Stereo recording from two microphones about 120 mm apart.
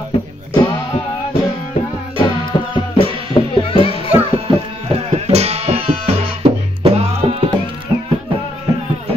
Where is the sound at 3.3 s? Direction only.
45° left (ahead or behind).